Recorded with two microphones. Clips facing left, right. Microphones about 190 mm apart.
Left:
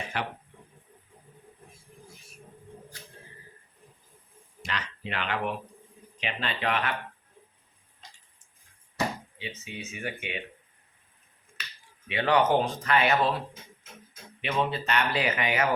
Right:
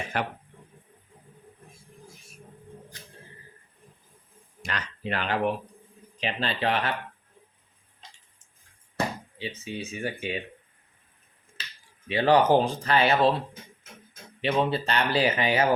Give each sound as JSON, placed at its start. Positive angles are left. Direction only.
{"t": 0.1, "sound": "a sound", "side_deg": -45}
{"t": 4.6, "sound": "a sound", "side_deg": -45}
{"t": 6.1, "sound": "speech", "side_deg": -35}
{"t": 9.6, "sound": "speech", "side_deg": -30}
{"t": 11.6, "sound": "finger snapping", "side_deg": -30}
{"t": 12.0, "sound": "speech", "side_deg": -35}
{"t": 14.4, "sound": "speech", "side_deg": -35}